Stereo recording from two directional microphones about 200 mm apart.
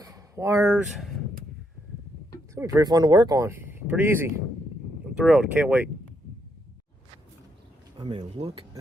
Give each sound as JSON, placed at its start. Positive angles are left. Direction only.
{"t": 0.0, "sound": "a sound", "side_deg": -15}
{"t": 2.6, "sound": "speech", "side_deg": -15}
{"t": 7.9, "sound": "speech", "side_deg": -20}